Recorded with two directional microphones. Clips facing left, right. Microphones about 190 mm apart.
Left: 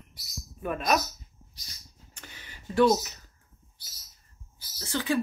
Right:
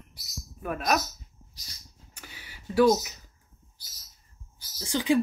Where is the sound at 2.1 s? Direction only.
10° right (ahead or behind).